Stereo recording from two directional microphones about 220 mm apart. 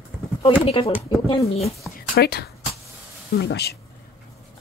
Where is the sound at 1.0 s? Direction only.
15° left (ahead or behind).